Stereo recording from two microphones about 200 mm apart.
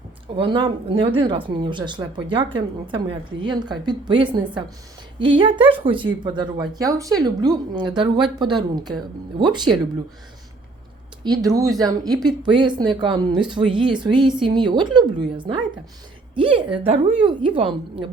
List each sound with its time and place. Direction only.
0.3 s speech: 25° right (ahead or behind)
5.4 s speech: 25° right (ahead or behind)
11.2 s speech: 20° right (ahead or behind)